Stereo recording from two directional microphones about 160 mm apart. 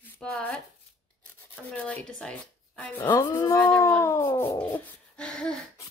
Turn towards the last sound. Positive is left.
turn(degrees=5)  # may be behind; listen again after turning